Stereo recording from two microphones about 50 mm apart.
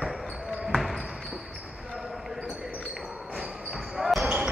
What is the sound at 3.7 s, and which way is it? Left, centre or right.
Basketball bounce, centre.